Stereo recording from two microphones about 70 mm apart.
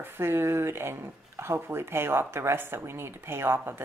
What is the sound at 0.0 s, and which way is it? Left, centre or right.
Speech, right.